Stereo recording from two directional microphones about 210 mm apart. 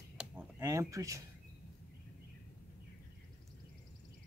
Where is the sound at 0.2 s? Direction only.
15° right (ahead or behind).